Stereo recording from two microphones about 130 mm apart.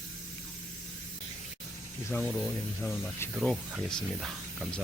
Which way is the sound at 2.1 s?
5° left (ahead or behind).